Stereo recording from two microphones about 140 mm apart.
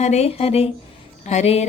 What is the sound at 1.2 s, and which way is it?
Music, 50° left (ahead or behind).